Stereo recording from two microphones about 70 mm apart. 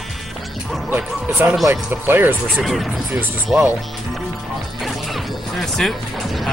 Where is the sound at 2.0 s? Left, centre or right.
Right.